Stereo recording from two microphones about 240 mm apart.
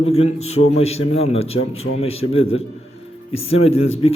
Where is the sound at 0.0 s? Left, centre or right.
Left.